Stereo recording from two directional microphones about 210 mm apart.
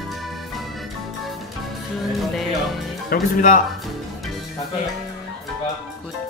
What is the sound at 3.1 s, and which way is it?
Speech, 40° left (ahead or behind).